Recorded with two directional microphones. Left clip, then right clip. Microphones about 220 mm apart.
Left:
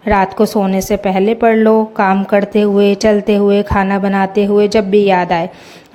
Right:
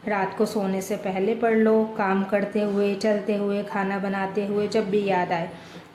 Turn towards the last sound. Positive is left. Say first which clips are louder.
# left 12 dB
turn(degrees=40)  # may be behind; listen again after turning